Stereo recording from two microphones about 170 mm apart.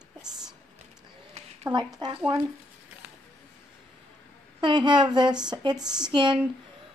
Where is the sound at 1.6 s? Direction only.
25° right (ahead or behind).